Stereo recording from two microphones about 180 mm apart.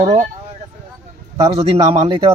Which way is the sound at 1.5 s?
30° right (ahead or behind).